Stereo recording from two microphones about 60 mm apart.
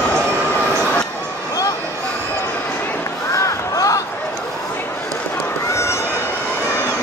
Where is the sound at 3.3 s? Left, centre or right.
Left.